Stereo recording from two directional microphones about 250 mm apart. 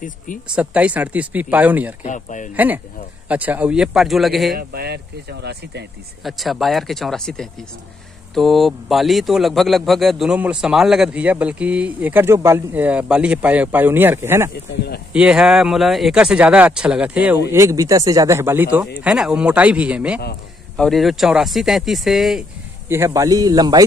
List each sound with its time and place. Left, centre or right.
0.6 s a man's voice: centre
2.0 s speech: left
2.5 s a man's voice: centre
4.6 s speech: right
6.2 s a man's voice: centre